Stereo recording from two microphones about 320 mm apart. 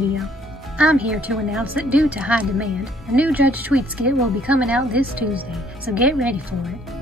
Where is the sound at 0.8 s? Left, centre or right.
Centre.